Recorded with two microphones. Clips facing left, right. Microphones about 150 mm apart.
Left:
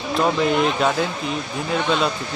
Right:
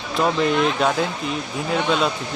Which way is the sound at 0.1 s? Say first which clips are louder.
Even; centre (ahead or behind).